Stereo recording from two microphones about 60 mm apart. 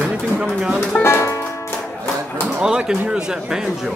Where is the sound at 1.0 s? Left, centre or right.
Left.